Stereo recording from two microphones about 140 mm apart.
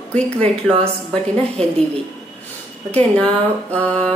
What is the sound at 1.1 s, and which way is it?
Speech, 45° right (ahead or behind).